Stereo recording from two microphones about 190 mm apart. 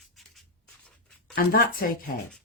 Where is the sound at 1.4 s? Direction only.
50° left (ahead or behind).